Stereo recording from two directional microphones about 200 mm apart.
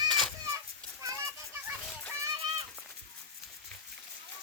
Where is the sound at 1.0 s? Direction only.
15° right (ahead or behind).